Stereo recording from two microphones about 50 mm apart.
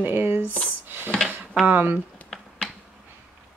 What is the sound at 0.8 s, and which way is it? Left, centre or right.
Drawer open or close, right.